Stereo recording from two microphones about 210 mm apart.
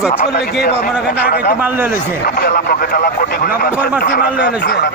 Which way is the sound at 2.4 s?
45° left (ahead or behind).